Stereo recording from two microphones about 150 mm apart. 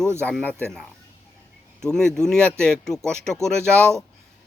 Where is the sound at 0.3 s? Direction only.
10° left (ahead or behind).